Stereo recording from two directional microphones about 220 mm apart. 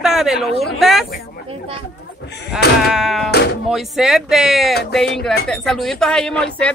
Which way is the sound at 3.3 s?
50° left (ahead or behind).